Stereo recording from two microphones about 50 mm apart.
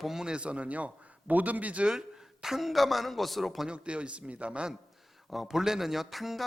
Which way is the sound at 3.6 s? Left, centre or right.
Right.